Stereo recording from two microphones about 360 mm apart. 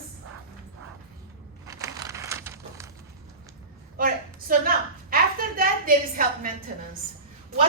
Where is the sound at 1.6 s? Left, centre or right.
Centre.